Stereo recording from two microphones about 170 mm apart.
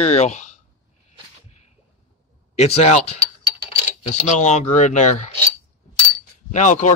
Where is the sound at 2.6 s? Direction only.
40° left (ahead or behind).